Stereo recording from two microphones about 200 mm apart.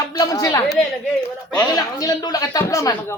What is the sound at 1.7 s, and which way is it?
A woman's voice, 20° left (ahead or behind).